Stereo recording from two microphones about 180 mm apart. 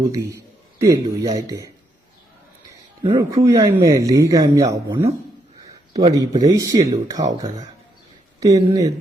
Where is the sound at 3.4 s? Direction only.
15° right (ahead or behind).